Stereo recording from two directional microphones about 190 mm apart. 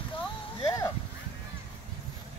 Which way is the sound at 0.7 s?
15° left (ahead or behind).